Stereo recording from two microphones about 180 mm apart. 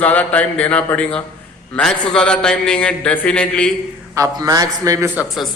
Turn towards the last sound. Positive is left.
turn(degrees=-10)  # may be behind; listen again after turning